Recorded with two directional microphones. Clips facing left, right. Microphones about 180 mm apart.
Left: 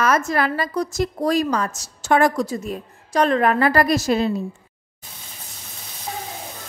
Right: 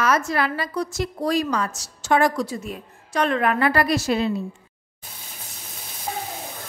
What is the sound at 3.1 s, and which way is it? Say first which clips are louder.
A woman's voice: left 4 dB; 35° left (ahead or behind).